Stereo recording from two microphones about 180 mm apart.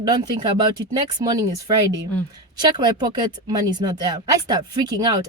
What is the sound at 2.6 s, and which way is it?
Speech, 25° right (ahead or behind).